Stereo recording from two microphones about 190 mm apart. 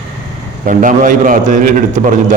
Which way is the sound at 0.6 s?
45° right (ahead or behind).